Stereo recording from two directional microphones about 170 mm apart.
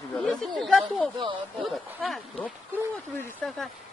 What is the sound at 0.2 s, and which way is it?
Speech, 5° left (ahead or behind).